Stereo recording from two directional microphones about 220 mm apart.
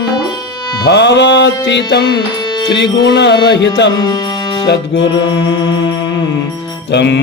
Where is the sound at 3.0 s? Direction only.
50° left (ahead or behind).